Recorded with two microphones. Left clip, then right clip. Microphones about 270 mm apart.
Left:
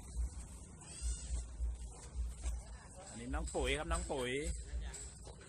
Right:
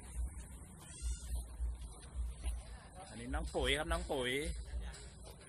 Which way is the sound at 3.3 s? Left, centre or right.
Centre.